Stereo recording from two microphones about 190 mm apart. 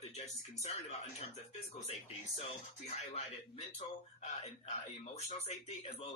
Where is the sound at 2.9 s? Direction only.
35° left (ahead or behind).